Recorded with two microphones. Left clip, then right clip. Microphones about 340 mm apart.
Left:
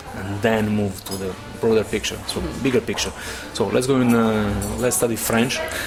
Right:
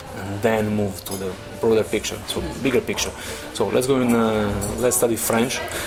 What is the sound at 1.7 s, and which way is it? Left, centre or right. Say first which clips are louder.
Speech: even; left.